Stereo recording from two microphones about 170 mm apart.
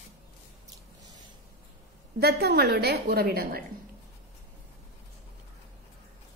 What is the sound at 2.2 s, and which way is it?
A woman's voice, 65° right (ahead or behind).